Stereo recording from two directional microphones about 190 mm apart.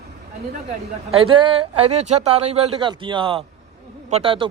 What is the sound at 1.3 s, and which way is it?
Speech, 30° right (ahead or behind).